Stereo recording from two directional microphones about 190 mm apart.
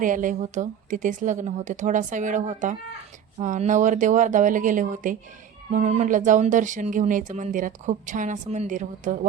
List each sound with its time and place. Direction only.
0.0 s speech: 45° right (ahead or behind)